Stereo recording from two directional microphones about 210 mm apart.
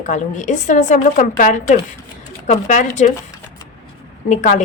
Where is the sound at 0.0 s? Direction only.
35° left (ahead or behind).